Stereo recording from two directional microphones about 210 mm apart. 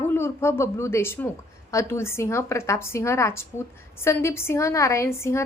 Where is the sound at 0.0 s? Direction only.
10° left (ahead or behind).